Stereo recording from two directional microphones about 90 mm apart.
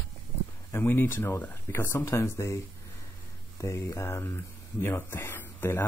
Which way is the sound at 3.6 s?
30° left (ahead or behind).